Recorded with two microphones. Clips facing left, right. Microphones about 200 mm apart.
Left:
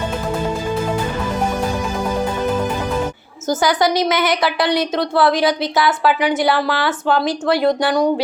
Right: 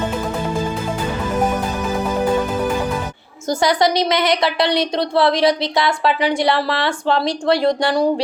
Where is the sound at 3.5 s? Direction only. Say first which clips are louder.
Even; centre (ahead or behind).